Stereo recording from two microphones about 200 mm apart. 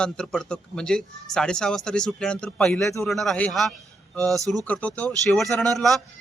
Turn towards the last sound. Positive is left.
turn(degrees=0)  # may be behind; listen again after turning